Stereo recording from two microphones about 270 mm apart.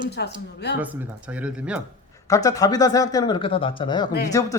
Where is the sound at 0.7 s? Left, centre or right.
Centre.